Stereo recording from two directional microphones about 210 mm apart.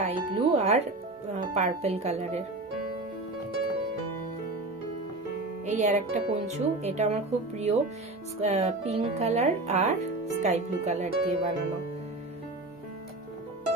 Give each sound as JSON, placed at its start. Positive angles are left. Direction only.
{"t": 0.0, "sound": "speech", "side_deg": -30}
{"t": 5.7, "sound": "speech", "side_deg": -35}